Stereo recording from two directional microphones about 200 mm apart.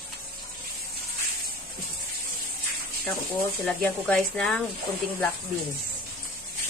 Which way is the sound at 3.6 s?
5° left (ahead or behind).